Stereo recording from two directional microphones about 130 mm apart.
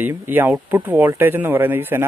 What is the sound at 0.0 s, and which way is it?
Speech, 15° right (ahead or behind).